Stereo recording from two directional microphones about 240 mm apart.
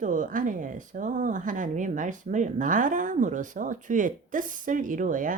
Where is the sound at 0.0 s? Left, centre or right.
Right.